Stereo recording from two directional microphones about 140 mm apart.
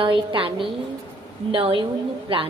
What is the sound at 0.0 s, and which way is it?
A woman's voice, 35° right (ahead or behind).